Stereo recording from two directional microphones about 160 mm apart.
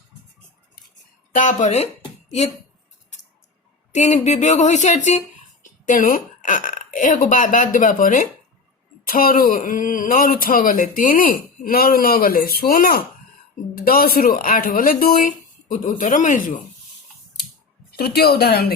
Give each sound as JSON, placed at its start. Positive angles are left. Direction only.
{"t": 1.3, "sound": "speech", "side_deg": 55}
{"t": 3.9, "sound": "a man's voice", "side_deg": 45}
{"t": 17.9, "sound": "speech", "side_deg": 80}